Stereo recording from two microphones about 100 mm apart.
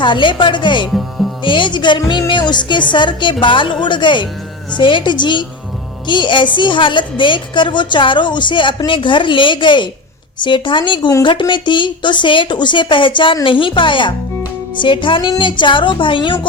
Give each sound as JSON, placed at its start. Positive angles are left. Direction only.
{"t": 0.0, "sound": "a woman's voice", "side_deg": 55}